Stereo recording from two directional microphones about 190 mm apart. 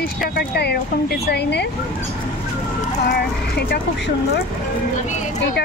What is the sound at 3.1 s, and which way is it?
Speech, 60° left (ahead or behind).